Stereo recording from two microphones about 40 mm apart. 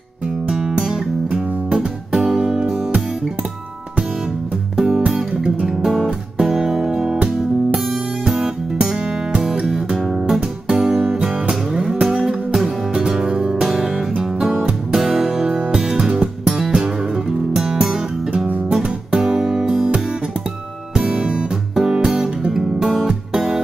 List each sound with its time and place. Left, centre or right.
0.5 s music: centre
4.7 s music: centre
5.0 s music: centre
15.0 s music: centre
18.8 s guitar: right
19.6 s music: centre
20.9 s music: right